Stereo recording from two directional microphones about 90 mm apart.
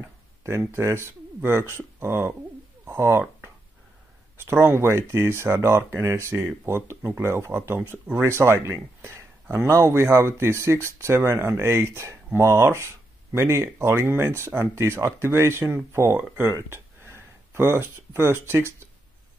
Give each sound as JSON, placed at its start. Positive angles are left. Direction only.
{"t": 0.0, "sound": "speech", "side_deg": -35}
{"t": 2.9, "sound": "a sound", "side_deg": -25}
{"t": 4.4, "sound": "speech", "side_deg": -25}